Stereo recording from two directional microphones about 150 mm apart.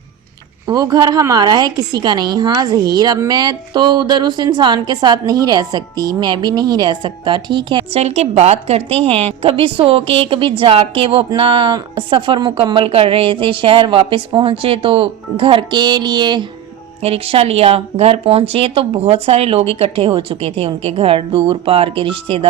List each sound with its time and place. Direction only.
0.7 s a woman's voice: 25° right (ahead or behind)
17.0 s speech: 40° right (ahead or behind)